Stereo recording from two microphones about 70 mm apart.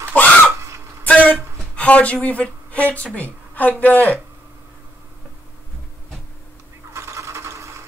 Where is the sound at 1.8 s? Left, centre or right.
Centre.